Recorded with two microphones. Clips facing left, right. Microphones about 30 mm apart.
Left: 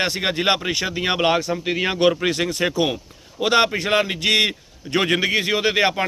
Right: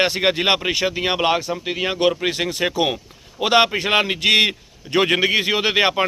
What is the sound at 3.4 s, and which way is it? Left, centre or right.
Speech, right.